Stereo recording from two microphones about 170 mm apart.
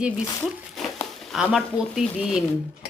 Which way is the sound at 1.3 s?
Centre (ahead or behind).